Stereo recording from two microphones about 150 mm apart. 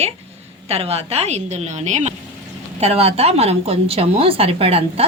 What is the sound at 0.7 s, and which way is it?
A woman's voice, 40° right (ahead or behind).